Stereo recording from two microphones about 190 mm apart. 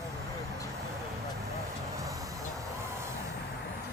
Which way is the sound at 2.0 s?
15° right (ahead or behind).